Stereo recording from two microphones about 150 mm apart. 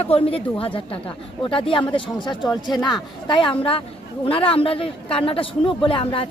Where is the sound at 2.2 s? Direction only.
30° left (ahead or behind).